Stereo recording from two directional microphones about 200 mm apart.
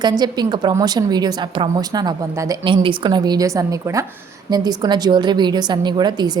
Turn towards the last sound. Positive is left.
turn(degrees=-20)  # may be behind; listen again after turning